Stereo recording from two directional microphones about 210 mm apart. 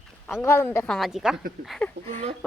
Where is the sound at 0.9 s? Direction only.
Centre (ahead or behind).